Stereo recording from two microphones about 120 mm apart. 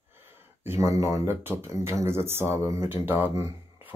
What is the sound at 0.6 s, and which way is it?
Speech, 20° right (ahead or behind).